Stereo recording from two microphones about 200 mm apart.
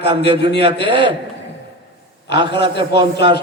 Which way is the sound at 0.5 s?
55° left (ahead or behind).